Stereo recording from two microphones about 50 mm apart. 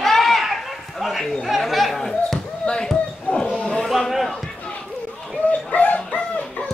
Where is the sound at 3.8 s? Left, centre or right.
Centre.